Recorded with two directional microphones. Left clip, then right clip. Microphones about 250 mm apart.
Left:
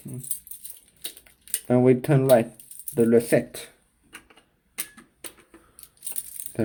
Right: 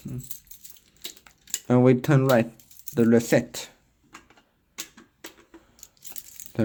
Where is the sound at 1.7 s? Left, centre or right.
Right.